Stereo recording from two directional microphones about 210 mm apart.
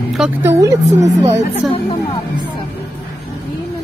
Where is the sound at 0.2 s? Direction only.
10° right (ahead or behind).